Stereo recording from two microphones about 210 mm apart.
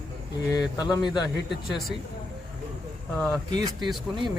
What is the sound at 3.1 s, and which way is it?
Speech, 5° left (ahead or behind).